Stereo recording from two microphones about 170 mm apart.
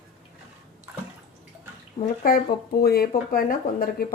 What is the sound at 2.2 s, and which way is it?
Speech, 60° left (ahead or behind).